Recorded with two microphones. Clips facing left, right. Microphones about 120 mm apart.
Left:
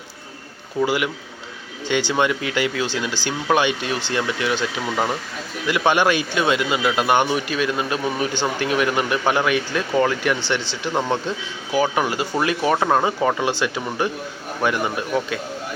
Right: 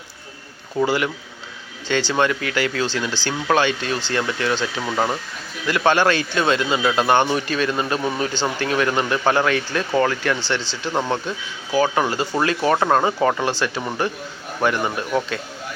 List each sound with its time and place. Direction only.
0.9 s speech: 10° left (ahead or behind)
12.7 s speech: centre (ahead or behind); by 13.8 s 15° left (ahead or behind)
14.9 s speech: 10° left (ahead or behind)